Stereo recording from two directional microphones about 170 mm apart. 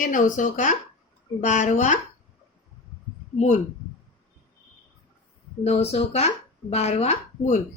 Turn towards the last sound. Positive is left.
turn(degrees=40)  # may be behind; listen again after turning